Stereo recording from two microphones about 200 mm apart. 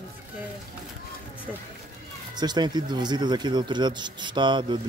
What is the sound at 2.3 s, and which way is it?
Speech, 20° right (ahead or behind).